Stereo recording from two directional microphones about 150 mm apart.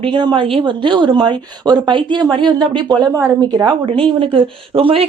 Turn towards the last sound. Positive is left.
turn(degrees=-40)  # may be behind; listen again after turning